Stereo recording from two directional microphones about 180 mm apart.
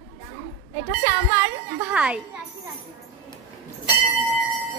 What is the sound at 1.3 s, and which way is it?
Speech, 15° right (ahead or behind).